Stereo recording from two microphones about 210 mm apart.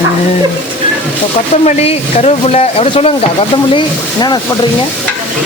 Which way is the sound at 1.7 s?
30° left (ahead or behind).